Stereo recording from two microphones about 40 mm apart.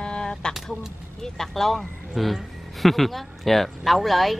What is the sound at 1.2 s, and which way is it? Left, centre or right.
Speech, centre.